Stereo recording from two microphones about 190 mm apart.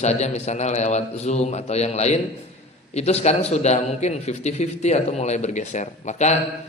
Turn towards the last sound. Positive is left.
turn(degrees=35)  # may be behind; listen again after turning